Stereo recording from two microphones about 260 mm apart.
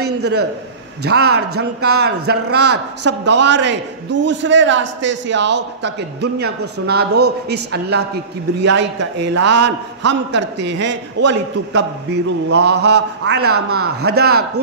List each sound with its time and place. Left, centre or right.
0.0 s a sound: right
1.0 s a man's voice: right
2.7 s speech: right
3.4 s a man's voice: right
13.4 s speech: right
14.0 s a man's voice: right